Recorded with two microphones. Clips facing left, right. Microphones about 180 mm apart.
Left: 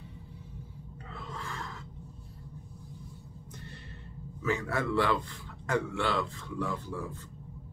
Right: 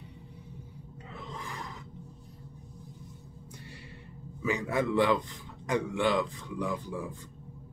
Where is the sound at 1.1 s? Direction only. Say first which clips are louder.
Even; 15° right (ahead or behind).